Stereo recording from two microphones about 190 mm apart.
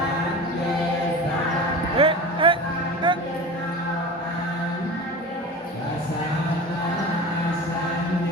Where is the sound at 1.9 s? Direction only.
30° right (ahead or behind).